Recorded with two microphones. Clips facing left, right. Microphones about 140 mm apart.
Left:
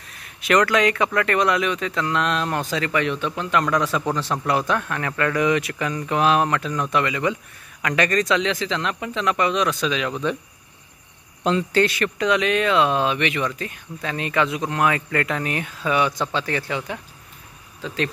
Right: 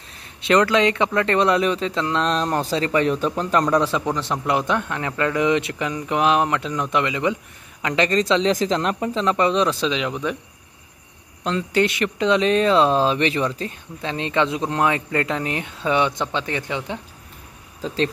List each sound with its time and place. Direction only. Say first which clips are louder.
0.2 s speech: right 1 dB; 25° right (ahead or behind)
4.0 s speech: even; 15° right (ahead or behind)
11.7 s speech: even; 20° right (ahead or behind)